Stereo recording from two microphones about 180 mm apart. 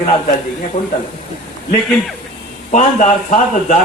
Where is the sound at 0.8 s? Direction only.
40° left (ahead or behind).